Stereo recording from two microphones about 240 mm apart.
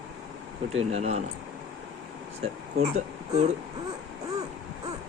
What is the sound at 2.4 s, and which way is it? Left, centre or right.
Speech, right.